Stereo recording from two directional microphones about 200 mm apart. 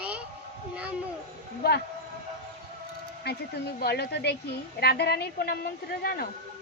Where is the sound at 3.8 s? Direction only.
55° left (ahead or behind).